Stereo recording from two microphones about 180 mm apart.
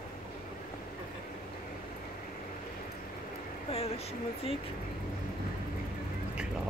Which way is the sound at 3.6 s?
35° left (ahead or behind).